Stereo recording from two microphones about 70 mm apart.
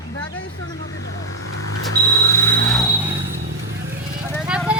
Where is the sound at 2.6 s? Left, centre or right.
Centre.